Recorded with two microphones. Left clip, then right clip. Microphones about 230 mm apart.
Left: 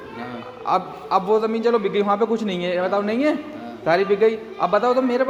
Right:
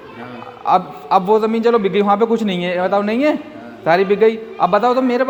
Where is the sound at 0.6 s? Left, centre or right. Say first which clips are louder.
Right 6 dB; right.